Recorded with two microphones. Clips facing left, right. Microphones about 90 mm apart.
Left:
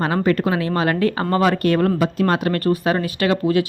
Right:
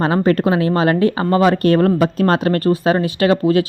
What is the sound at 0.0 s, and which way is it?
Speech, 25° right (ahead or behind).